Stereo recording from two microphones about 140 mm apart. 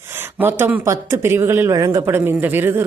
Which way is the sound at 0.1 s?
15° right (ahead or behind).